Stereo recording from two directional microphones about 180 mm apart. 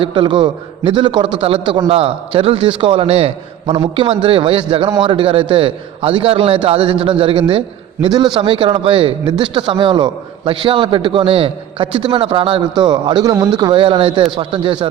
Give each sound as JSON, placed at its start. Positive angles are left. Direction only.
{"t": 0.0, "sound": "a man's voice", "side_deg": -25}